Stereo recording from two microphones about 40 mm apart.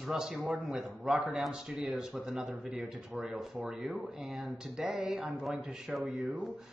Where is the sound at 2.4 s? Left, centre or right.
Right.